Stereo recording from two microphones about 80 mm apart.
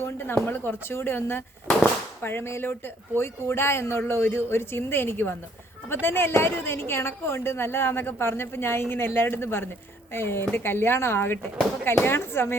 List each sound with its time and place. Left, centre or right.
0.0 s a woman's voice: left